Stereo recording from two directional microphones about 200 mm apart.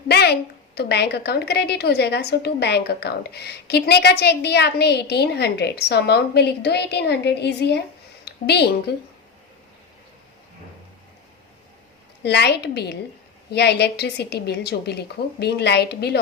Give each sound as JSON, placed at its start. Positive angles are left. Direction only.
{"t": 0.1, "sound": "a sound", "side_deg": 55}
{"t": 0.8, "sound": "a woman's voice", "side_deg": 55}
{"t": 12.2, "sound": "a woman's voice", "side_deg": 55}